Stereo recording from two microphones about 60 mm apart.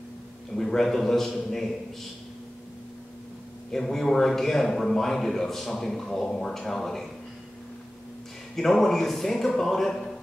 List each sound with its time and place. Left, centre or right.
0.5 s a man's voice: centre
3.7 s a man's voice: centre
8.5 s speech: centre